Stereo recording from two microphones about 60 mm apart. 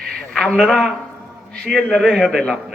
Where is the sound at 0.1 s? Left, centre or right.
Centre.